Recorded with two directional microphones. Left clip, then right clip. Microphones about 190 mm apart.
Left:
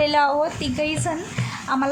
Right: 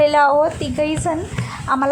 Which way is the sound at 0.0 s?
20° right (ahead or behind).